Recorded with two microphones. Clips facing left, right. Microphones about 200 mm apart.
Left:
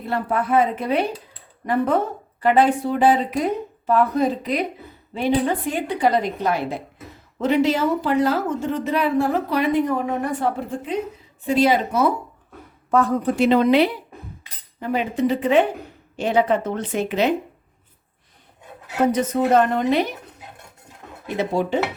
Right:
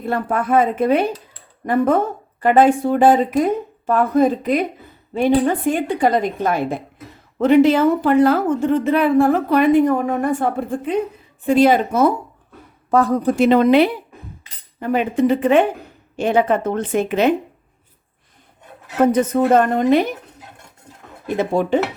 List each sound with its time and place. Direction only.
0.0 s speech: 50° right (ahead or behind)
12.9 s speech: 35° right (ahead or behind)
19.1 s speech: 50° right (ahead or behind)
21.2 s speech: 50° right (ahead or behind)